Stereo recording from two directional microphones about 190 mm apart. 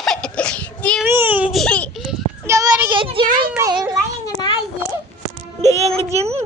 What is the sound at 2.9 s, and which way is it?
Speech, 25° right (ahead or behind).